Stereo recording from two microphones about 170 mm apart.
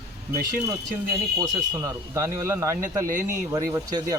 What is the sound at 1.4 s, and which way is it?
Speech, 20° right (ahead or behind).